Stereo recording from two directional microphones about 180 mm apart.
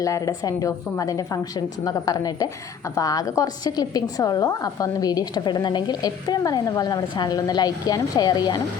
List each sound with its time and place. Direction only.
0.0 s a woman's voice: 20° left (ahead or behind)